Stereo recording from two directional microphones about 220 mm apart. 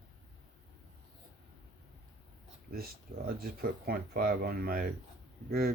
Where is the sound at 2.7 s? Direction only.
45° right (ahead or behind).